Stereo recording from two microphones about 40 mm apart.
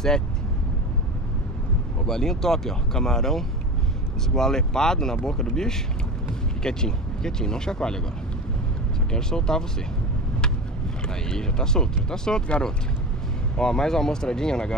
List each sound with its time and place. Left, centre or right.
2.0 s speech: centre
9.1 s speech: centre
11.1 s speech: centre